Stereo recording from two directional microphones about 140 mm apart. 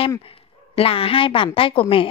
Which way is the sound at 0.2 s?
40° left (ahead or behind).